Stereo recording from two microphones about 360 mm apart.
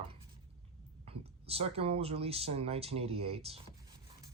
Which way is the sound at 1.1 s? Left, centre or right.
Centre.